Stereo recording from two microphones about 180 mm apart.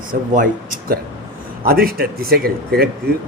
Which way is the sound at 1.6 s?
55° right (ahead or behind).